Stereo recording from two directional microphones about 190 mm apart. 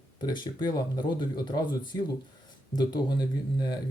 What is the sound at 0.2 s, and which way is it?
Speech, 20° left (ahead or behind).